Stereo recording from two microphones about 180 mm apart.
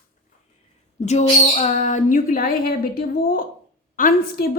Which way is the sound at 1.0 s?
40° left (ahead or behind).